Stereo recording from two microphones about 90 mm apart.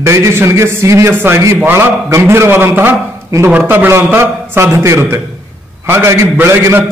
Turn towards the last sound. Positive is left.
turn(degrees=-25)  # may be behind; listen again after turning